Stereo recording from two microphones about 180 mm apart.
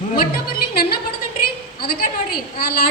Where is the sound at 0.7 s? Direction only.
60° left (ahead or behind).